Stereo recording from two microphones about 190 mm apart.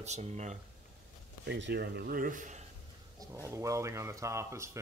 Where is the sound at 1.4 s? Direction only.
65° right (ahead or behind); by 2.6 s 40° right (ahead or behind).